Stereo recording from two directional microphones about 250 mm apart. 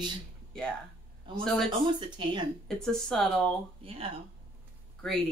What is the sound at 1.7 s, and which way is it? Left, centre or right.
Speech, centre.